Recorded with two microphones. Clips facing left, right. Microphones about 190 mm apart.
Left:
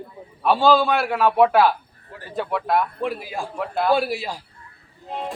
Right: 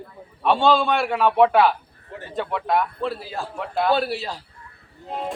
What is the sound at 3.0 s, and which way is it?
A man's voice, 15° left (ahead or behind).